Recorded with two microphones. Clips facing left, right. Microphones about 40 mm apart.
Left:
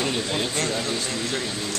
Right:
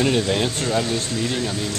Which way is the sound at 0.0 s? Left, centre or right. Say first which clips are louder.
Right 6 dB; centre.